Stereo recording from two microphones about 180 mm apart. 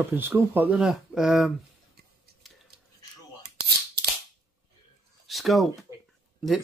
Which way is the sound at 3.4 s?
60° right (ahead or behind).